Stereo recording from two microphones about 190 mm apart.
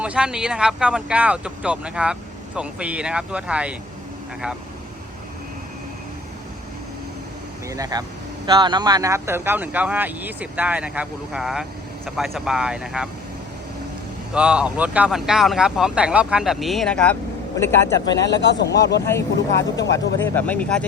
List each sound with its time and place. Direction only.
0.0 s speech: 5° right (ahead or behind)
7.7 s speech: 20° right (ahead or behind); by 13.1 s 5° right (ahead or behind)
14.3 s speech: 5° right (ahead or behind); by 18.2 s 20° left (ahead or behind)
18.5 s speech: 60° left (ahead or behind)
19.0 s speech: 15° left (ahead or behind)